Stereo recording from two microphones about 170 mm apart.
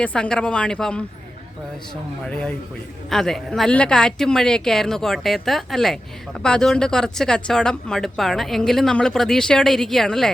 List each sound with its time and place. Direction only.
0.0 s speech: 5° left (ahead or behind)
2.2 s speech: 5° left (ahead or behind)